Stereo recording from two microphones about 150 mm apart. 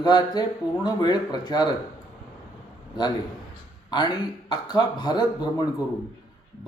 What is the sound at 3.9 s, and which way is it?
Speech, 30° left (ahead or behind).